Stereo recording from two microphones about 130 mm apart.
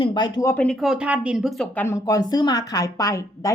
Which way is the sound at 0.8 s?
5° right (ahead or behind).